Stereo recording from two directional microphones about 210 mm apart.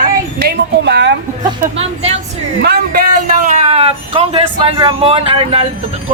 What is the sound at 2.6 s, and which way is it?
A man's voice, 45° right (ahead or behind).